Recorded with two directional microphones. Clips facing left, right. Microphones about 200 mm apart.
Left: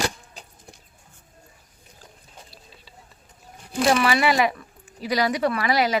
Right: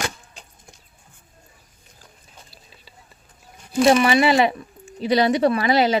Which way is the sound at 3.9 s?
25° right (ahead or behind).